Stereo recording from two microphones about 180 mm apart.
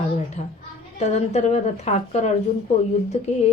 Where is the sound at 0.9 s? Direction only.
40° left (ahead or behind).